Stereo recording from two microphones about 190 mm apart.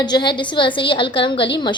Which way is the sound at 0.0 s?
20° left (ahead or behind).